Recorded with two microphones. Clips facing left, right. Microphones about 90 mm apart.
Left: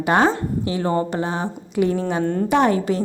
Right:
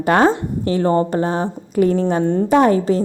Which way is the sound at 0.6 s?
40° right (ahead or behind).